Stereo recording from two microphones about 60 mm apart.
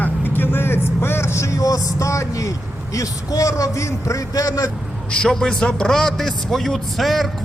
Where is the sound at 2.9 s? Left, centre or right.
Left.